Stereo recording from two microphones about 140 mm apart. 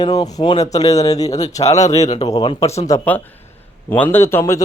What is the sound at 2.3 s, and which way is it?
Speech, 30° left (ahead or behind).